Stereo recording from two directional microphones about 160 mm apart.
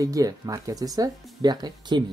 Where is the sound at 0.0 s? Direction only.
20° right (ahead or behind).